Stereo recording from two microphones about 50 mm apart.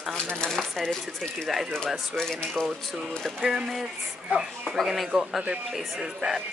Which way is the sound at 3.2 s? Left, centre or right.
Centre.